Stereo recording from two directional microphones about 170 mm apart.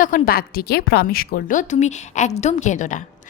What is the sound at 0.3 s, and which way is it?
A woman's voice, 60° left (ahead or behind).